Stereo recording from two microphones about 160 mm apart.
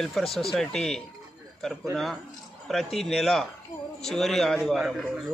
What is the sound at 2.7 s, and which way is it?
Speech, centre (ahead or behind).